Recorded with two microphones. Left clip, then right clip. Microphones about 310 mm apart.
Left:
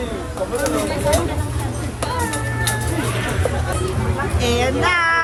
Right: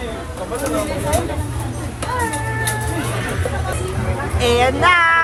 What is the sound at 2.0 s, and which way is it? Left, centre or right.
Music, centre.